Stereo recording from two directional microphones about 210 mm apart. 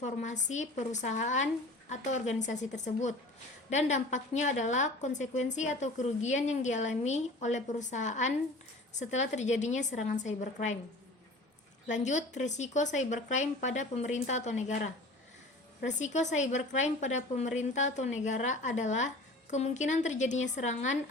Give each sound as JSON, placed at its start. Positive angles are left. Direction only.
{"t": 0.0, "sound": "a woman's voice", "side_deg": 35}
{"t": 11.9, "sound": "a woman's voice", "side_deg": 35}